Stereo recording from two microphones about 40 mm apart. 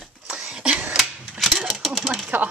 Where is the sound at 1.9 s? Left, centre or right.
Centre.